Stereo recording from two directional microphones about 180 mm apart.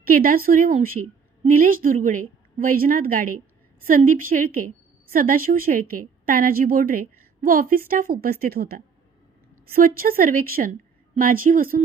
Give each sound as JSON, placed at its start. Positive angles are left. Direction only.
{"t": 0.0, "sound": "a woman's voice", "side_deg": -55}